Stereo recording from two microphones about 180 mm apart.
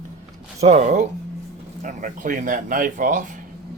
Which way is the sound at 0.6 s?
40° right (ahead or behind).